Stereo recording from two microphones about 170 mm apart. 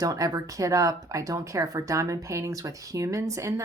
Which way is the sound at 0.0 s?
20° right (ahead or behind).